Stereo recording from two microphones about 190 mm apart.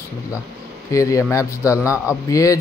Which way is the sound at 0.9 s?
15° left (ahead or behind).